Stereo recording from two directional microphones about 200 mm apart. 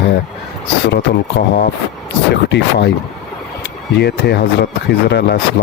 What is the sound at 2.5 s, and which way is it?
Speech, 55° left (ahead or behind).